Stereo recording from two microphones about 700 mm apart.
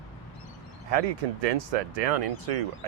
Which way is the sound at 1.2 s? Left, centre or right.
Right.